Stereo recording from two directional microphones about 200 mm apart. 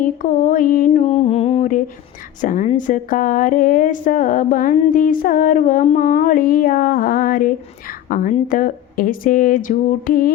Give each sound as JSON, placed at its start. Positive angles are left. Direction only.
{"t": 0.0, "sound": "speech", "side_deg": 40}